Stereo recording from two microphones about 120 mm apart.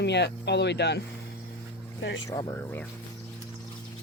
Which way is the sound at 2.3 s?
35° left (ahead or behind).